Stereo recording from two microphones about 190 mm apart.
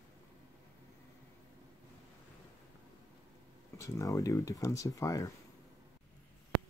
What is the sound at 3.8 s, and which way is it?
Speech, 15° left (ahead or behind).